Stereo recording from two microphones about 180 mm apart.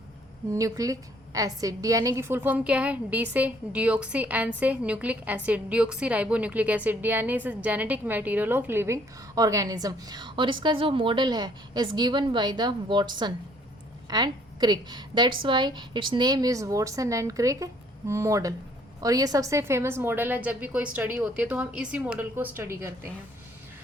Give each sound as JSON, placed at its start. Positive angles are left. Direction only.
{"t": 0.5, "sound": "a woman's voice", "side_deg": -20}